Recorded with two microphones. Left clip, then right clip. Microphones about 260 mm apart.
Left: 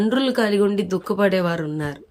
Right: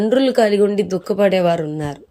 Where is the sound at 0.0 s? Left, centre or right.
Centre.